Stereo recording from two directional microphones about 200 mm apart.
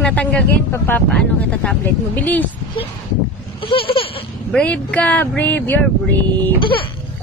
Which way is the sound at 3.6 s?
25° left (ahead or behind).